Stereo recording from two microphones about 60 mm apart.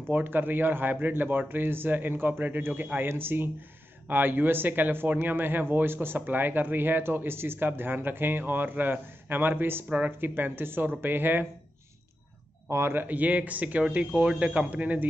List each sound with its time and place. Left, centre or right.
0.1 s speech: right
9.8 s speech: right
10.2 s speech: right
12.6 s speech: right